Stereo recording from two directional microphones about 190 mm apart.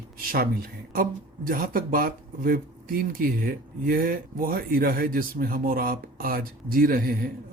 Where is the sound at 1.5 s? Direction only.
50° right (ahead or behind).